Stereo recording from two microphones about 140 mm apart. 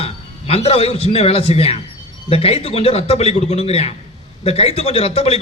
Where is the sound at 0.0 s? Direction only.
45° left (ahead or behind).